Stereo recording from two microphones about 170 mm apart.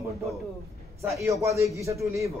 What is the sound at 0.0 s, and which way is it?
A man's voice, 15° right (ahead or behind).